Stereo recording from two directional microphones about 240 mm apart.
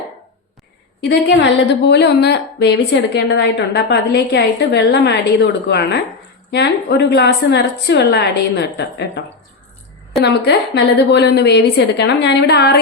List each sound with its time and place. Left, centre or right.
1.0 s a woman's voice: left
10.2 s a woman's voice: left